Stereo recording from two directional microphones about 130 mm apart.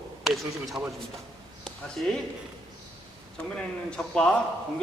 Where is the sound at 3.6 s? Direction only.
5° left (ahead or behind).